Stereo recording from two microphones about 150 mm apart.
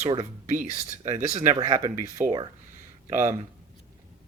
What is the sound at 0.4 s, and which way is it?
Speech, 55° right (ahead or behind).